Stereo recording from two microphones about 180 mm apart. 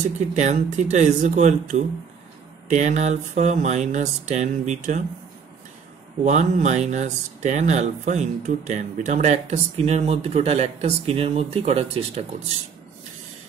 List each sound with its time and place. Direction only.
0.4 s speech: 40° right (ahead or behind)
6.2 s speech: 40° right (ahead or behind)